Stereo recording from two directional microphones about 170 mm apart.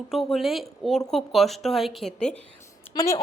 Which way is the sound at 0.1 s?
Centre (ahead or behind).